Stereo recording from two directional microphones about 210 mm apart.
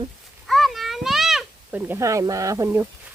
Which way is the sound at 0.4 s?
Centre (ahead or behind).